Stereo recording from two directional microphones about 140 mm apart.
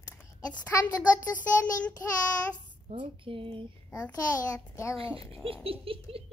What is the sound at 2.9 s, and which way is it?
Baby laughter, 40° right (ahead or behind).